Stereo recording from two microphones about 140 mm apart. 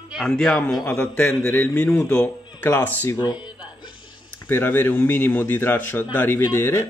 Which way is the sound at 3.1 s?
30° left (ahead or behind).